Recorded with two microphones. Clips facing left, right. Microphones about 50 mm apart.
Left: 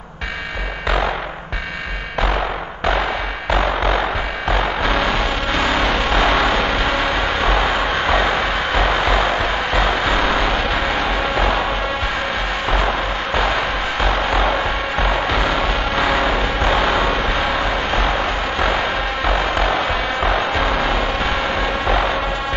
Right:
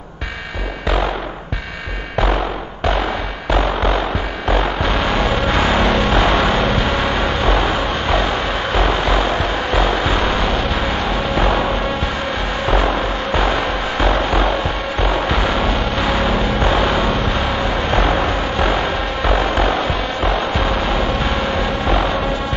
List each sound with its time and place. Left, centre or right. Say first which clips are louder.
3.5 s music: right 1 dB; centre
5.1 s a sound: right 3 dB; centre
6.0 s a sound: right 1 dB; centre
6.6 s vehicle: right 1 dB; centre
7.0 s vehicle: right 1 dB; centre
8.1 s vehicle: even; centre
8.8 s music: even; centre
11.3 s music: right 3 dB; centre
13.4 s music: even; centre
16.0 s a sound: left 2 dB; centre
16.3 s vehicle: right 1 dB; centre
17.9 s vehicle: right 4 dB; centre
19.2 s music: right 2 dB; centre
20.2 s music: even; centre